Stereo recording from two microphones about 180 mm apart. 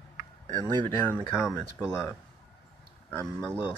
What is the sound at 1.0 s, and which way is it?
Speech, 15° left (ahead or behind).